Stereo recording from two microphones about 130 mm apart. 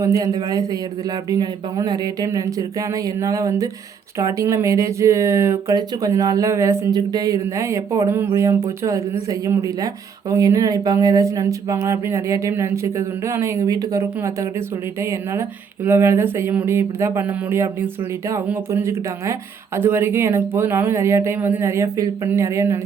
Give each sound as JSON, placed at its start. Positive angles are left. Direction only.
{"t": 0.0, "sound": "speech", "side_deg": -25}